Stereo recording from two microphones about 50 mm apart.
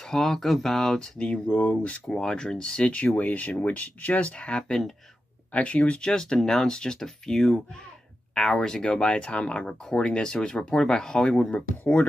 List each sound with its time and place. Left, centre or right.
0.0 s speech: centre
1.5 s speech: left
2.0 s speech: centre
3.2 s speech: left; by 11.4 s centre
11.5 s speech: left